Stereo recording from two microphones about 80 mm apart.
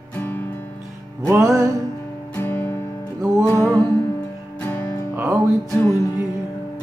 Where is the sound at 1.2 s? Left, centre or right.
Right.